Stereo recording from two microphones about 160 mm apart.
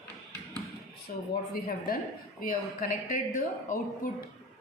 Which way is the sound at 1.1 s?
60° left (ahead or behind).